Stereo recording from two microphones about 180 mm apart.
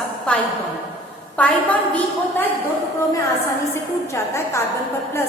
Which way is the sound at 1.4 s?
10° left (ahead or behind).